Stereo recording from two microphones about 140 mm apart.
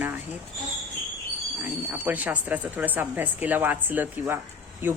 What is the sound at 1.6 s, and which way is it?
Speech, 10° right (ahead or behind).